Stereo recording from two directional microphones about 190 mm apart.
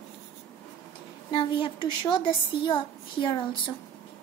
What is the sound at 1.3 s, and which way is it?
A woman's voice, 25° left (ahead or behind).